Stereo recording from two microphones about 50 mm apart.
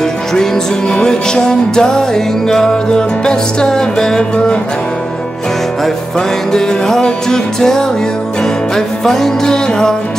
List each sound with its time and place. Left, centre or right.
0.3 s music: centre
6.1 s music: centre